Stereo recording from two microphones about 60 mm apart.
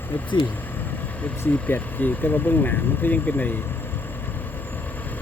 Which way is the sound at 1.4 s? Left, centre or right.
Left.